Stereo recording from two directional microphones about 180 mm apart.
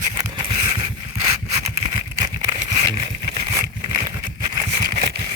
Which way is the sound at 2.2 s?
20° right (ahead or behind).